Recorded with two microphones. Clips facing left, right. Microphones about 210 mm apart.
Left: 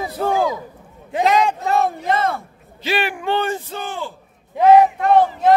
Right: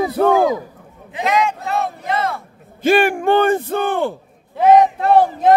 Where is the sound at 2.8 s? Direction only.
50° right (ahead or behind).